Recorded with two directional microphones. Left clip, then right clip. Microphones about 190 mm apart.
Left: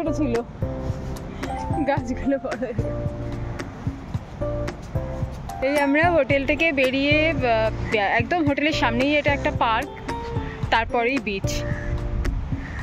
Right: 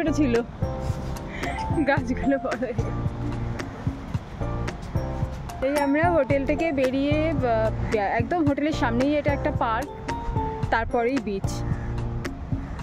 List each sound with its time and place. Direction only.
0.0 s speech: 15° right (ahead or behind)
1.9 s speech: 5° right (ahead or behind)
5.6 s speech: centre (ahead or behind); by 11.6 s 15° right (ahead or behind)